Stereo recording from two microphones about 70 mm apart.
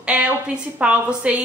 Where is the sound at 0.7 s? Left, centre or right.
Centre.